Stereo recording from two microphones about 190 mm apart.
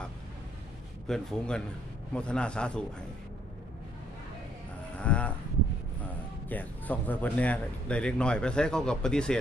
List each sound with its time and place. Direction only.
1.0 s speech: 5° left (ahead or behind)
4.9 s mechanisms: 5° left (ahead or behind)
6.5 s speech: 10° left (ahead or behind)